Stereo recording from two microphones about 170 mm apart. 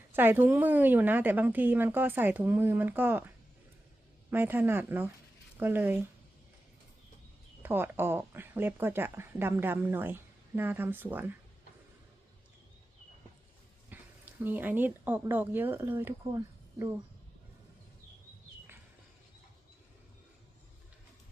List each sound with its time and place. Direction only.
0.1 s speech: 10° right (ahead or behind)
4.3 s speech: 10° right (ahead or behind)
7.6 s speech: 10° right (ahead or behind)
13.9 s a sound: 10° right (ahead or behind)
14.4 s speech: 10° right (ahead or behind)